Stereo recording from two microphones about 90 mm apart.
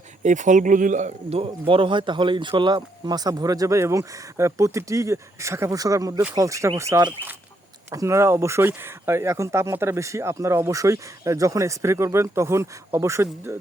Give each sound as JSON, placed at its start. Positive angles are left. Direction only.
{"t": 1.4, "sound": "speech", "side_deg": -85}